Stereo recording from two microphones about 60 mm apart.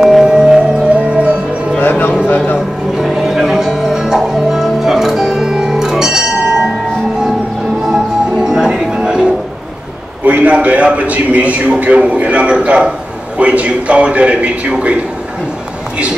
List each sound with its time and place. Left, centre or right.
0.0 s music: centre
1.8 s music: left
2.2 s a sound: left
3.0 s music: centre
7.8 s music: centre
10.2 s a man's voice: right